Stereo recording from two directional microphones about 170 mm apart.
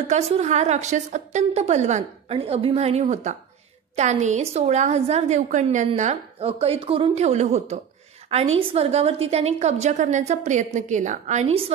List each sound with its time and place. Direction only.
0.1 s a woman's voice: 40° right (ahead or behind)